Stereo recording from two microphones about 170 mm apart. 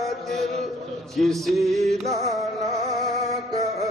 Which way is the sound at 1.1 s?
Centre (ahead or behind).